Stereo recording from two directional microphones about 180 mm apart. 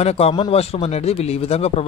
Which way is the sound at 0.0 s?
35° left (ahead or behind).